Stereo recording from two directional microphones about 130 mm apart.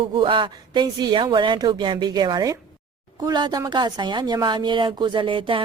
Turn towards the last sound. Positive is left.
turn(degrees=-40)  # may be behind; listen again after turning